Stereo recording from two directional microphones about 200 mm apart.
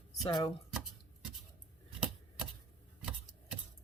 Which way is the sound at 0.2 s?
20° left (ahead or behind).